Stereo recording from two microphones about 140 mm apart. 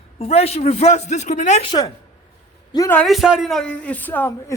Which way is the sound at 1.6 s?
30° left (ahead or behind).